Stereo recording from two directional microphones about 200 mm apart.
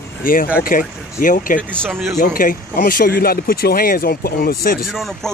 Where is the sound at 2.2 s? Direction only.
45° left (ahead or behind).